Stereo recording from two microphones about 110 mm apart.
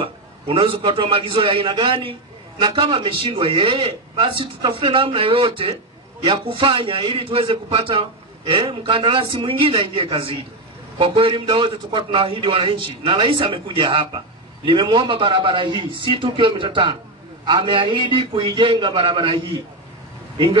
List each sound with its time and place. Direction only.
0.0 s a man's voice: 50° right (ahead or behind)